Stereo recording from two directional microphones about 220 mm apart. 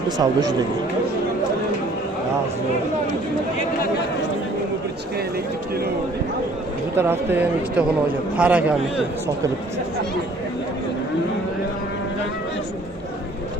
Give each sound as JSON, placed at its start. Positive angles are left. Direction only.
{"t": 0.2, "sound": "speech", "side_deg": -15}
{"t": 6.9, "sound": "speech", "side_deg": -10}